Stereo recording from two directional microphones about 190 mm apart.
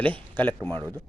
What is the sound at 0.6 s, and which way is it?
Speech, 25° right (ahead or behind).